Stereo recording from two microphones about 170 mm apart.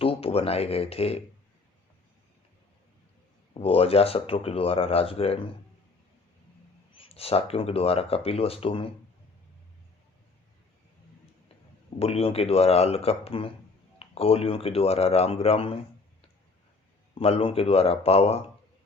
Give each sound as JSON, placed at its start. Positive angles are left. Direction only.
{"t": 0.0, "sound": "speech", "side_deg": 35}
{"t": 3.5, "sound": "speech", "side_deg": 35}
{"t": 6.9, "sound": "speech", "side_deg": 35}
{"t": 11.9, "sound": "speech", "side_deg": 35}
{"t": 17.2, "sound": "speech", "side_deg": 35}